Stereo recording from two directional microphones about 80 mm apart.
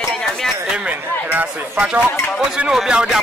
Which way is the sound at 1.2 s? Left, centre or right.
Right.